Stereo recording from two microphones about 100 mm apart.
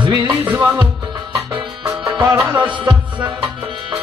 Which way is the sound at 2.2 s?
40° right (ahead or behind).